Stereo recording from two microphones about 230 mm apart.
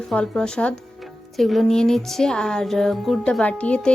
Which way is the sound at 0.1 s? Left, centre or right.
Centre.